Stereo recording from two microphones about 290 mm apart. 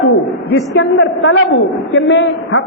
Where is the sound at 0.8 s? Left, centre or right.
Left.